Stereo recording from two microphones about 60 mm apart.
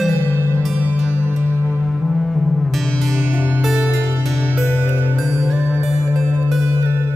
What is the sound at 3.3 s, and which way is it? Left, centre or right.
Music, right.